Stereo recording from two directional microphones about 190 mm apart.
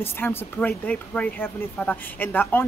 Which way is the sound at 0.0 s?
10° left (ahead or behind).